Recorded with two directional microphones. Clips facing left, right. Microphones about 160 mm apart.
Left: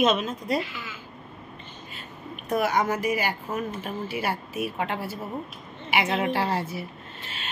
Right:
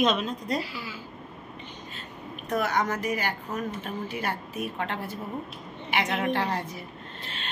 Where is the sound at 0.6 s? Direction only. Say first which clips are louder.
Right 1 dB; 35° right (ahead or behind).